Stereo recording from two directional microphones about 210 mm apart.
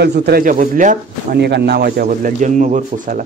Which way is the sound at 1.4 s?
50° right (ahead or behind).